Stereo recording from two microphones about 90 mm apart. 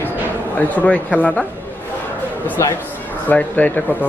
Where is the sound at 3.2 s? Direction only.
20° left (ahead or behind).